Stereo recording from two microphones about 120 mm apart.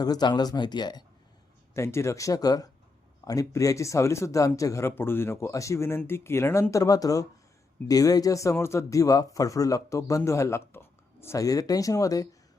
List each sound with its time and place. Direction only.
0.0 s speech: 35° left (ahead or behind)
1.7 s speech: 25° left (ahead or behind)